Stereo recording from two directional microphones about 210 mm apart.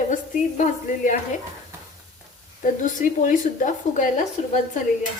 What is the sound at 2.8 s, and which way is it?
A woman's voice, 40° left (ahead or behind).